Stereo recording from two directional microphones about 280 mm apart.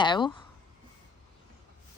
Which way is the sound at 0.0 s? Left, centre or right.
Centre.